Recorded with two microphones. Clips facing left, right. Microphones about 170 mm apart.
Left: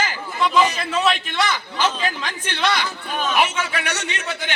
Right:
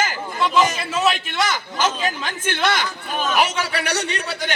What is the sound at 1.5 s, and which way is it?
Speech, 45° right (ahead or behind).